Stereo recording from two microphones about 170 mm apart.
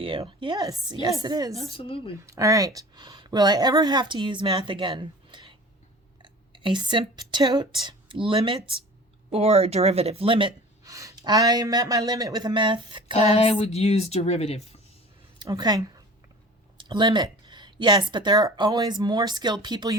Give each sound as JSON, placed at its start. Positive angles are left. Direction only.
{"t": 0.0, "sound": "speech", "side_deg": -30}
{"t": 1.7, "sound": "speech", "side_deg": 35}
{"t": 2.2, "sound": "speech", "side_deg": -20}
{"t": 13.1, "sound": "speech", "side_deg": 35}
{"t": 15.4, "sound": "speech", "side_deg": -25}